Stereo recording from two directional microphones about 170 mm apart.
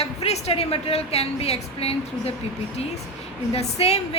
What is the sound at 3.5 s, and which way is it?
Speech, 40° left (ahead or behind).